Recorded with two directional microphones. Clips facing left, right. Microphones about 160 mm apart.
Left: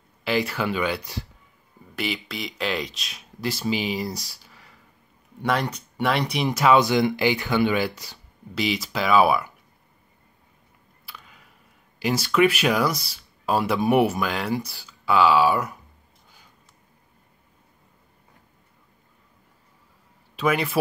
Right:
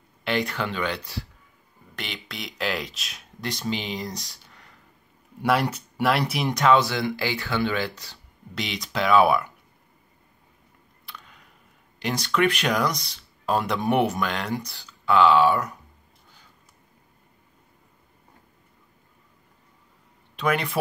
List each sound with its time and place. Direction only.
0.2 s speech: 5° left (ahead or behind)
4.3 s a sound: 5° left (ahead or behind)
5.4 s speech: 5° right (ahead or behind)
6.8 s speech: 15° left (ahead or behind)
11.1 s a sound: 5° left (ahead or behind)
12.0 s speech: 5° left (ahead or behind)
20.3 s speech: 5° left (ahead or behind)